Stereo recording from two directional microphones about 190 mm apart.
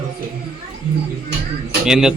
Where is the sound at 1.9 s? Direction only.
5° right (ahead or behind).